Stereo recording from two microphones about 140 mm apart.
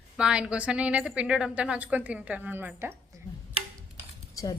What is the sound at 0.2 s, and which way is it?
A woman's voice, 5° right (ahead or behind).